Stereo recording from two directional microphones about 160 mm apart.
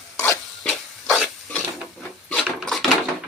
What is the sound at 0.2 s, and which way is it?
Rub, 10° left (ahead or behind).